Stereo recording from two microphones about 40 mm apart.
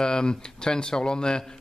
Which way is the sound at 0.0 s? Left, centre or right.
Centre.